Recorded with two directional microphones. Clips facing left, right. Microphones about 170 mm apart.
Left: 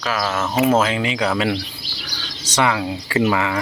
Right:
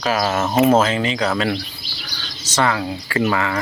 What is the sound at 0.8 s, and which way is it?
Speech, 10° left (ahead or behind).